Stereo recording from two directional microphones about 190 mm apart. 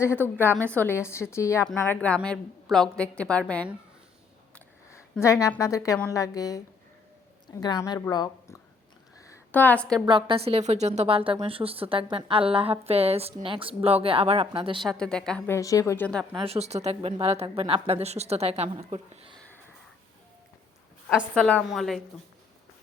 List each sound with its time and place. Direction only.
0.0 s a woman's voice: 10° left (ahead or behind)
4.5 s a sound: 10° left (ahead or behind)
6.1 s a woman's voice: 15° left (ahead or behind)
10.1 s a woman's voice: 25° right (ahead or behind)
14.8 s a woman's voice: 5° left (ahead or behind)
16.4 s speech: 35° right (ahead or behind)
21.1 s a woman's voice: 5° right (ahead or behind)